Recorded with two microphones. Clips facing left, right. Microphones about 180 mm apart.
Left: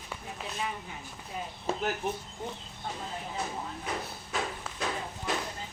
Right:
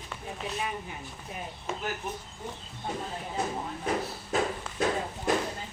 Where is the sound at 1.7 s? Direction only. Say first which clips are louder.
Left 4 dB; 35° left (ahead or behind).